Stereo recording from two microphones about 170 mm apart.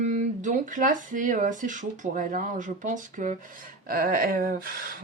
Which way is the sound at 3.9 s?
60° right (ahead or behind).